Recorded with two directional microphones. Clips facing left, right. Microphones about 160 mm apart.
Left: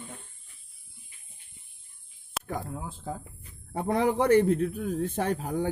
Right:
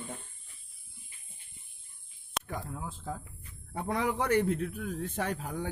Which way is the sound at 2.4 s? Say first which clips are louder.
Even; 5° left (ahead or behind).